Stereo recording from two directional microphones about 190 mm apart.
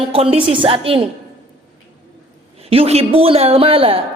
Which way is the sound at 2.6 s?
30° right (ahead or behind).